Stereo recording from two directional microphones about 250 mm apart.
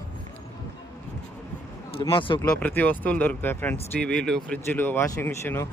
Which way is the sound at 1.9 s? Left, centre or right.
Centre.